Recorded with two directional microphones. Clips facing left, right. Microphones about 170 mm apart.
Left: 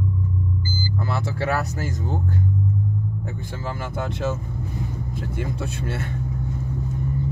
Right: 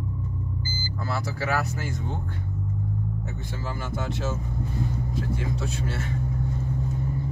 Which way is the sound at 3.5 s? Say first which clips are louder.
Left 2 dB; 55° left (ahead or behind).